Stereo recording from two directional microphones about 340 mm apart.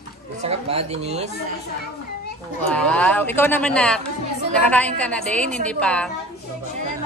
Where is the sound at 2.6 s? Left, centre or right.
Centre.